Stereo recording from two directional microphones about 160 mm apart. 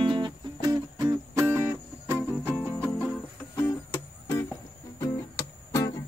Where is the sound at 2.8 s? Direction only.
10° left (ahead or behind).